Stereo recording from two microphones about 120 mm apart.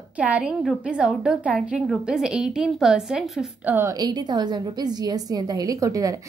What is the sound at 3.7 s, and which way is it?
Speech, 20° right (ahead or behind).